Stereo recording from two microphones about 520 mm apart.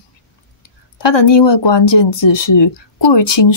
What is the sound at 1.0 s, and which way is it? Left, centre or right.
Speech, left.